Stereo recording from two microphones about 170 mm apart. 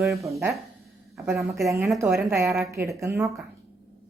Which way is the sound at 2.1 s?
15° right (ahead or behind).